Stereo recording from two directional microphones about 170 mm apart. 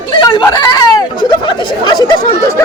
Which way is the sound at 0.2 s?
25° left (ahead or behind).